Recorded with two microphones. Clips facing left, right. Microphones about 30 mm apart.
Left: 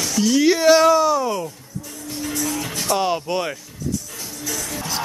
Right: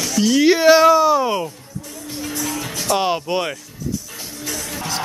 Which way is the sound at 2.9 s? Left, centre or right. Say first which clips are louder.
Right 2 dB; right.